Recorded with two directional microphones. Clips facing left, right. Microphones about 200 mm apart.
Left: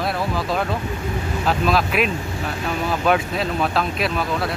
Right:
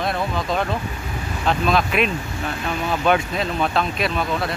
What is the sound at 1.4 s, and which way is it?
Speech, 5° left (ahead or behind).